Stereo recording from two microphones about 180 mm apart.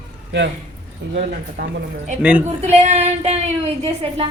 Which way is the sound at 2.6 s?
35° right (ahead or behind).